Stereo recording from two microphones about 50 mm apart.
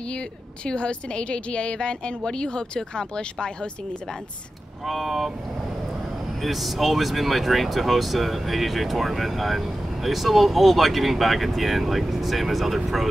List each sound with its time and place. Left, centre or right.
0.7 s a woman's voice: centre
4.8 s speech: centre
6.4 s speech: centre